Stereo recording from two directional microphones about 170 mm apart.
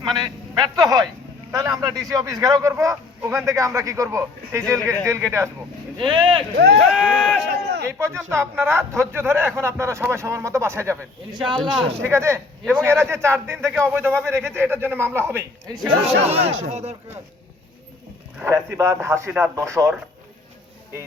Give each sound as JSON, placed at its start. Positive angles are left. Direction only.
{"t": 0.0, "sound": "a man's voice", "side_deg": -25}
{"t": 6.1, "sound": "a man's voice", "side_deg": -30}
{"t": 6.7, "sound": "speech", "side_deg": 5}
{"t": 7.5, "sound": "a sound", "side_deg": -70}
{"t": 7.9, "sound": "speech", "side_deg": -15}
{"t": 12.0, "sound": "speech", "side_deg": -15}
{"t": 16.2, "sound": "speech", "side_deg": -35}
{"t": 18.3, "sound": "speech", "side_deg": -15}